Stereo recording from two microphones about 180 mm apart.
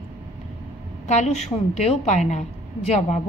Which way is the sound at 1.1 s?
40° left (ahead or behind).